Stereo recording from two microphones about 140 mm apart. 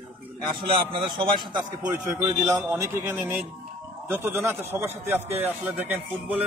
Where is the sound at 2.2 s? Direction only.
25° right (ahead or behind).